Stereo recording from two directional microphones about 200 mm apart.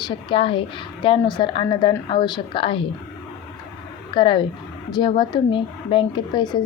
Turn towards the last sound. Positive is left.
turn(degrees=20)  # may be behind; listen again after turning